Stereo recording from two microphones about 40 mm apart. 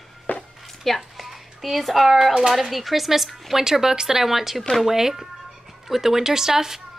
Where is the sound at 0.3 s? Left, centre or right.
Left.